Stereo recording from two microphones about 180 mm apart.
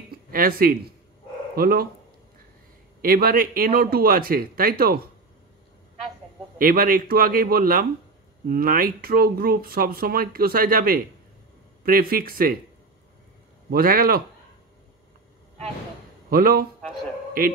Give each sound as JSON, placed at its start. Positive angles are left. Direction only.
{"t": 0.3, "sound": "a man's voice", "side_deg": -55}
{"t": 3.0, "sound": "speech", "side_deg": -55}
{"t": 6.6, "sound": "a man's voice", "side_deg": -50}
{"t": 13.7, "sound": "a man's voice", "side_deg": -55}
{"t": 16.3, "sound": "speech", "side_deg": -55}